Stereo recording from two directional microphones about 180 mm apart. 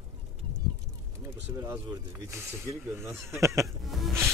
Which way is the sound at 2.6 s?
15° right (ahead or behind).